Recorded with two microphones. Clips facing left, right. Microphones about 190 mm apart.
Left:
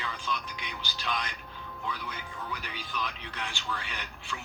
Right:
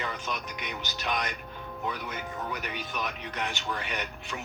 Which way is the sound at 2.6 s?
60° right (ahead or behind).